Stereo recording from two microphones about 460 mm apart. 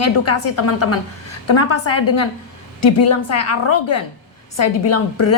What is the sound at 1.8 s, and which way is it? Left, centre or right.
Speech, left.